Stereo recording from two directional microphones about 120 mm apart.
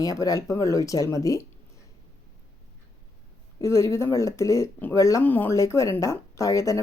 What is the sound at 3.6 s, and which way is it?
Speech, 25° left (ahead or behind).